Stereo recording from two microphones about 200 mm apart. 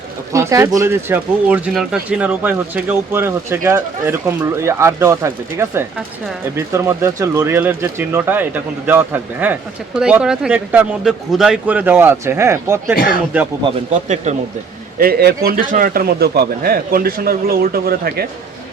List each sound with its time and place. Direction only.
0.3 s speech: 15° right (ahead or behind)
13.9 s speech: 35° right (ahead or behind)
14.9 s a man's voice: 50° right (ahead or behind)